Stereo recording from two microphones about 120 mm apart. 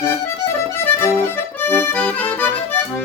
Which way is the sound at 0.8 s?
20° left (ahead or behind).